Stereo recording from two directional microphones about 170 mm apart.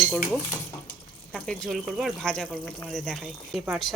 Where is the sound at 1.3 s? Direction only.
Centre (ahead or behind).